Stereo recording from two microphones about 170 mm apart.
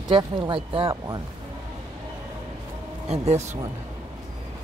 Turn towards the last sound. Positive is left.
turn(degrees=-40)  # may be behind; listen again after turning